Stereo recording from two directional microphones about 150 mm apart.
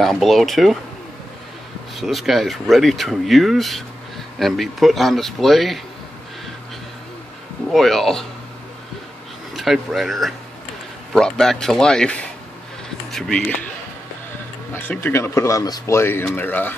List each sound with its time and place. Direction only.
0.0 s speech: centre (ahead or behind)
2.0 s speech: centre (ahead or behind)
7.7 s speech: centre (ahead or behind)
9.5 s speech: 5° right (ahead or behind)
14.7 s speech: 15° left (ahead or behind)